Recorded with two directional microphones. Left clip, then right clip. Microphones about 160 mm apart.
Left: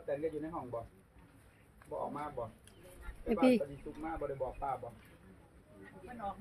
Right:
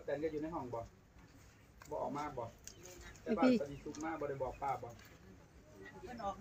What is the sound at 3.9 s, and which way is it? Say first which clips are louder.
Speech: left 2 dB; 25° right (ahead or behind).